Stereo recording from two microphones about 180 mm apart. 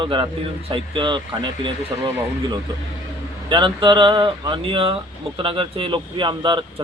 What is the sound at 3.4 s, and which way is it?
Speech, 25° right (ahead or behind).